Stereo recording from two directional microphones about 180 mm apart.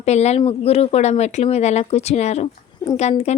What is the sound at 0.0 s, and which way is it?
Speech, 35° left (ahead or behind).